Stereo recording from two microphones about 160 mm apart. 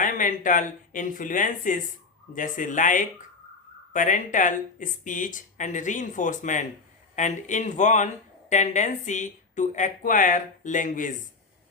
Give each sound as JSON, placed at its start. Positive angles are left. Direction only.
{"t": 0.0, "sound": "speech", "side_deg": 55}